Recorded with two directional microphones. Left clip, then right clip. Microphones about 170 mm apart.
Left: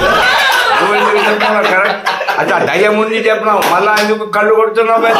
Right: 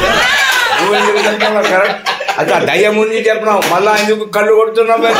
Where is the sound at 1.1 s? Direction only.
20° right (ahead or behind).